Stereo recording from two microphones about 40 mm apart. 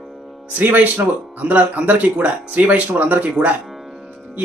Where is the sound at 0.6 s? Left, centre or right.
Right.